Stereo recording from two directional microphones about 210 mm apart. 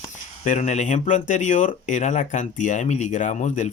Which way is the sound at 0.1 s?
35° left (ahead or behind).